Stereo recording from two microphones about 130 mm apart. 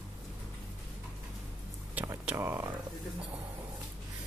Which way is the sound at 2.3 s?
15° right (ahead or behind).